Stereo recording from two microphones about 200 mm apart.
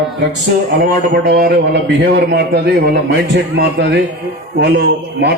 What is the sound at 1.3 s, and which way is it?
A man's voice, 55° right (ahead or behind).